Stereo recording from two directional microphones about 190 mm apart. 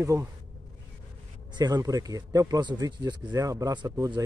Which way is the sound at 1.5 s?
20° right (ahead or behind).